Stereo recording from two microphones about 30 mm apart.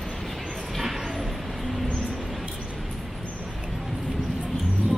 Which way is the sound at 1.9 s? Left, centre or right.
Left.